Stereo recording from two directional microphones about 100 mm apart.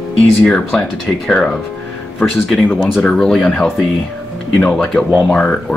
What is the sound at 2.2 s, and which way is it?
Speech, 15° left (ahead or behind).